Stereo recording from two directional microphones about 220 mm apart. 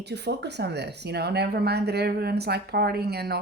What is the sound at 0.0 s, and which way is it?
Speech, 50° right (ahead or behind).